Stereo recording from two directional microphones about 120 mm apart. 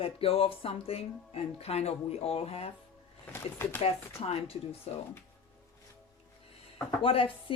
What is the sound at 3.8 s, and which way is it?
Speech, 55° left (ahead or behind).